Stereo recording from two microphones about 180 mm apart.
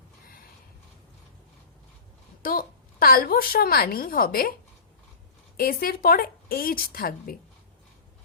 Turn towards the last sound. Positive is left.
turn(degrees=55)  # may be behind; listen again after turning